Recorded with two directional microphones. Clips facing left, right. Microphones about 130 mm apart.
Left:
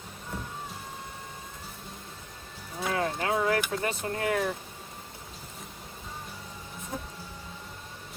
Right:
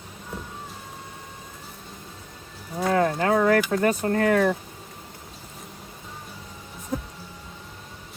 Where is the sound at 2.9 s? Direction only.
50° right (ahead or behind).